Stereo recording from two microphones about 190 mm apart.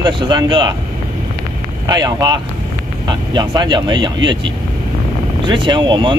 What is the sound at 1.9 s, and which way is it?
Speech, 20° right (ahead or behind).